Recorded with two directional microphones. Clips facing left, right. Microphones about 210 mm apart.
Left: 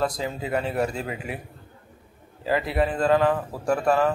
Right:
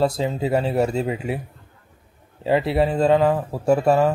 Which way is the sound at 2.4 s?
25° right (ahead or behind).